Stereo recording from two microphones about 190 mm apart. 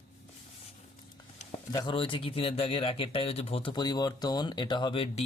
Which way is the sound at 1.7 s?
25° left (ahead or behind).